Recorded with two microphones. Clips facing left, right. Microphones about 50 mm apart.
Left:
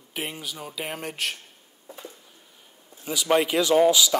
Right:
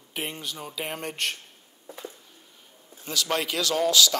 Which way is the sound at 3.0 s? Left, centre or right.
Centre.